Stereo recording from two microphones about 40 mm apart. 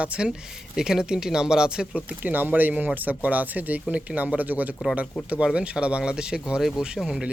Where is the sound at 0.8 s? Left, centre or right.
Centre.